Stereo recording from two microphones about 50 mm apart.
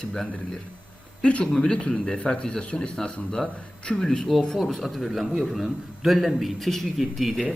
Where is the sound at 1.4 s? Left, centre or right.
Centre.